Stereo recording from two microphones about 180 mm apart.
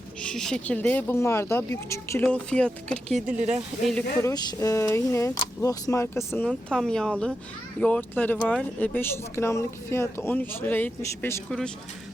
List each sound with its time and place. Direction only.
0.2 s speech: 5° left (ahead or behind)
3.3 s speech: 40° right (ahead or behind)
4.2 s speech: 15° left (ahead or behind)